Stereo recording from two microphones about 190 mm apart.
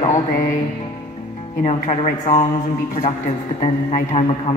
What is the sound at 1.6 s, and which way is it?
Speech, 35° left (ahead or behind).